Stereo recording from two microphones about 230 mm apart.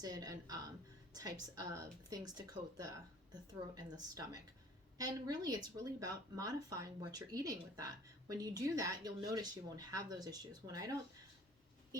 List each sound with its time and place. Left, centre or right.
0.0 s a woman's voice: centre